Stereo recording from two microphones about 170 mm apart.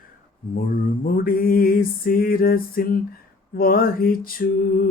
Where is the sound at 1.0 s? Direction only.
60° left (ahead or behind).